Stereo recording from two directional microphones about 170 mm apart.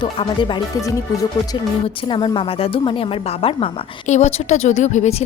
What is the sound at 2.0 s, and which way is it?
A woman's voice, 30° left (ahead or behind).